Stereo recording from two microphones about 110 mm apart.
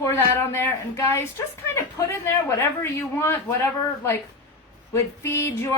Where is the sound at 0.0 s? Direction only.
25° left (ahead or behind).